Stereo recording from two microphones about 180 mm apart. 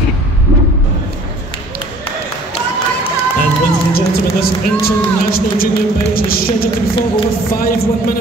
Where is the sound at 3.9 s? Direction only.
55° left (ahead or behind).